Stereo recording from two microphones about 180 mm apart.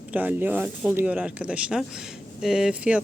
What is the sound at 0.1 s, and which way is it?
Speech, 10° right (ahead or behind).